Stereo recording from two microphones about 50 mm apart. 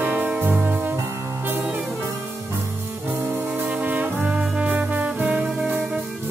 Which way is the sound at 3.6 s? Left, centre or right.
Right.